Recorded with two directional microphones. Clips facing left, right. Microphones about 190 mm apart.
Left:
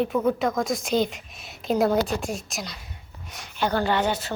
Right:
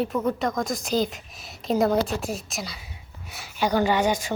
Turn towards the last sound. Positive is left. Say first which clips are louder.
# right 2 dB
turn(degrees=-10)  # may be behind; listen again after turning